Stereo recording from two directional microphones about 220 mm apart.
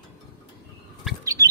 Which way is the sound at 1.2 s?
15° right (ahead or behind).